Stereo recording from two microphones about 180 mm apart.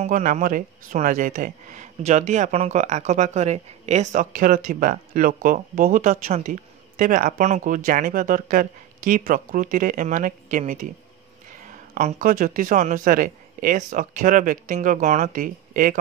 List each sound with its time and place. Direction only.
0.0 s speech: 45° right (ahead or behind)